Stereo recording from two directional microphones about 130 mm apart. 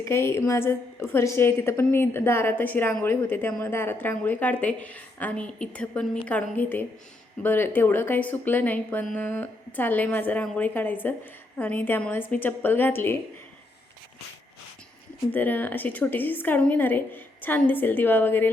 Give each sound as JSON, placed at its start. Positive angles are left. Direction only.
{"t": 0.0, "sound": "a woman's voice", "side_deg": 20}
{"t": 15.3, "sound": "a woman's voice", "side_deg": 15}